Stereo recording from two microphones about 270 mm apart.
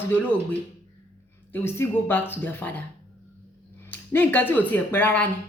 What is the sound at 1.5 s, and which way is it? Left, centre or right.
A man's voice, centre.